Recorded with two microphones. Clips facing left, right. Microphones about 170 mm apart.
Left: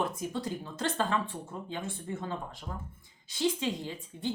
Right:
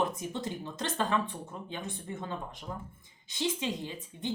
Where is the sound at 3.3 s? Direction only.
20° right (ahead or behind).